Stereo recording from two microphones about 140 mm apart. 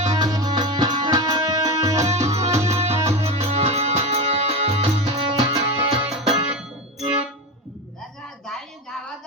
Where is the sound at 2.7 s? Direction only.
50° right (ahead or behind).